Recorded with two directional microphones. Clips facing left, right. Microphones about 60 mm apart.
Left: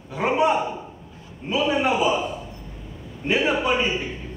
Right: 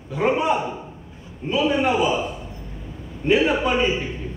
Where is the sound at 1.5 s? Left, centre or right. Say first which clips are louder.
Right 1 dB; centre.